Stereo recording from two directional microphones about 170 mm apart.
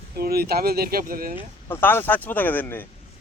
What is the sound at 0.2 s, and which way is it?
Speech, 65° right (ahead or behind).